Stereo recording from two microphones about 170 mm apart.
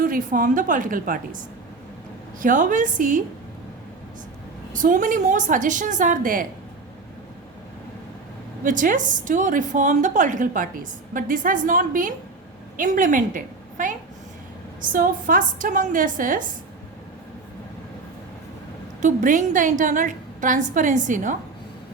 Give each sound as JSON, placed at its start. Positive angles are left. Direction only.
{"t": 0.0, "sound": "a woman's voice", "side_deg": -55}
{"t": 2.4, "sound": "a woman's voice", "side_deg": -50}
{"t": 4.8, "sound": "a woman's voice", "side_deg": -50}
{"t": 8.6, "sound": "a woman's voice", "side_deg": -50}
{"t": 19.0, "sound": "a woman's voice", "side_deg": -50}